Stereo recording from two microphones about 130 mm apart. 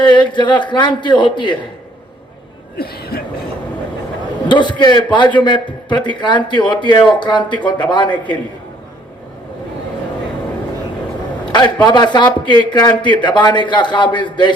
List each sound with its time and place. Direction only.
0.0 s a man's voice: 35° left (ahead or behind)
4.4 s a man's voice: 35° left (ahead or behind)
11.5 s a man's voice: 35° left (ahead or behind)